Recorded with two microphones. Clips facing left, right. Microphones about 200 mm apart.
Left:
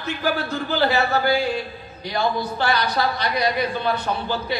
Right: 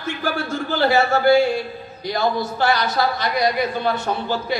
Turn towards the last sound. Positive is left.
turn(degrees=-45)  # may be behind; listen again after turning